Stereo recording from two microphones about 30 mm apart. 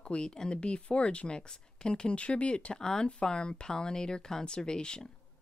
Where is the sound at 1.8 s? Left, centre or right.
Left.